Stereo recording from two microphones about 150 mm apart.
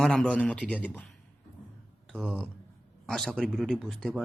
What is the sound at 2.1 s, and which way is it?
Speech, 5° left (ahead or behind).